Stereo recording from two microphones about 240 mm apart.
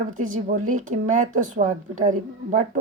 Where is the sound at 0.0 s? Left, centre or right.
Right.